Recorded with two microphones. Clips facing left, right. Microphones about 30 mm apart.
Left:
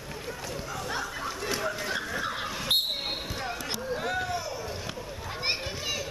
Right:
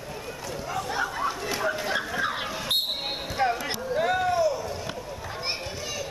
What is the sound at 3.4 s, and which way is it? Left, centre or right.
Basketball bounce, right.